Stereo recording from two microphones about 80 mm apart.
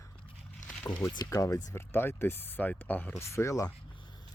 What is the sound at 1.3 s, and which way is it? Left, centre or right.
Speech, left.